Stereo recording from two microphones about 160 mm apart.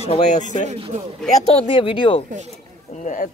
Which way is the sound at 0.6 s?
35° right (ahead or behind).